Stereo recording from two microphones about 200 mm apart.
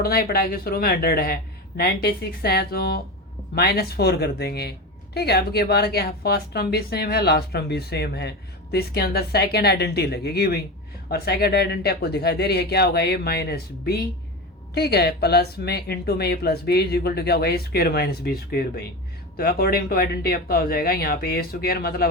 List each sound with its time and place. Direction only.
0.0 s speech: 50° left (ahead or behind)